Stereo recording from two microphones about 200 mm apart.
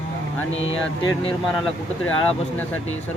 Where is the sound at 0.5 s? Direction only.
70° left (ahead or behind).